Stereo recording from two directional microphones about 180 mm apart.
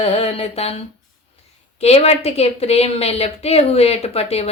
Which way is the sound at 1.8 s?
35° left (ahead or behind).